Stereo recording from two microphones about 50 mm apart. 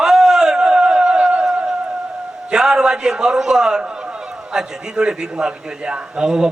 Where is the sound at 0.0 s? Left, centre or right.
Centre.